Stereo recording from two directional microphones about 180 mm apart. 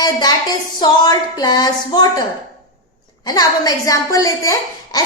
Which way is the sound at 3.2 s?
20° left (ahead or behind).